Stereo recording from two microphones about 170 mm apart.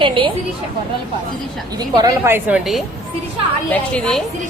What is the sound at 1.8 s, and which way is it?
Speech, 25° right (ahead or behind).